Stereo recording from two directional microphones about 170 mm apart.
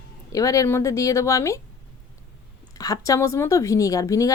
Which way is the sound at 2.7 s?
20° left (ahead or behind).